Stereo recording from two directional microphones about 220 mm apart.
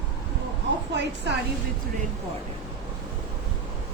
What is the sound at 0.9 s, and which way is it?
Speech, 50° right (ahead or behind).